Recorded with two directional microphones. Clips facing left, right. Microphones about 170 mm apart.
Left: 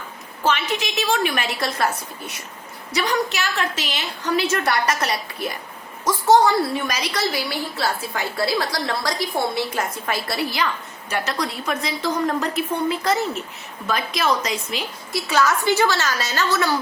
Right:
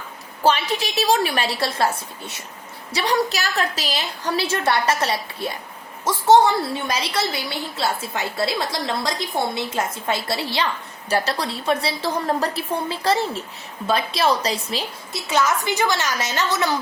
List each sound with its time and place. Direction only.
0.4 s a woman's voice: 35° right (ahead or behind)
15.3 s a woman's voice: 20° right (ahead or behind)